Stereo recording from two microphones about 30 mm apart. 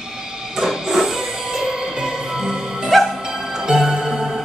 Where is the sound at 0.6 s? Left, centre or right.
Centre.